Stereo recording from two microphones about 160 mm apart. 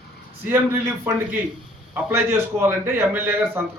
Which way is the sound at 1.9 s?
15° right (ahead or behind).